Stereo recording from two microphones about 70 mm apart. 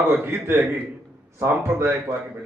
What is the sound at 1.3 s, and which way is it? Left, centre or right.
Speech, right.